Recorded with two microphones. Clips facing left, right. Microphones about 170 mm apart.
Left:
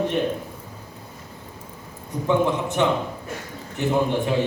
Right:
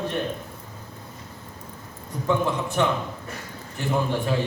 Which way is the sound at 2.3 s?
20° left (ahead or behind).